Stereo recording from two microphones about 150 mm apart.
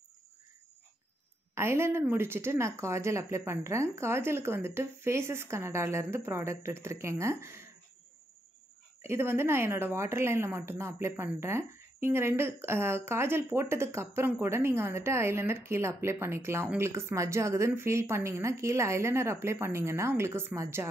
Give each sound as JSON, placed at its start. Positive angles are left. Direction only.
{"t": 1.5, "sound": "speech", "side_deg": -15}
{"t": 9.0, "sound": "speech", "side_deg": -15}